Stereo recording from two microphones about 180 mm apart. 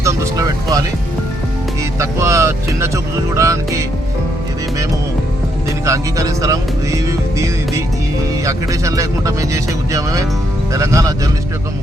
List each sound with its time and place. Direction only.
0.0 s music: 20° right (ahead or behind)
2.0 s speech: 15° right (ahead or behind)
5.8 s music: 15° right (ahead or behind)
8.4 s speech: 20° right (ahead or behind)